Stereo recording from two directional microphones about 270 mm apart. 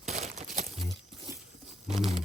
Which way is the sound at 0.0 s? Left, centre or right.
Right.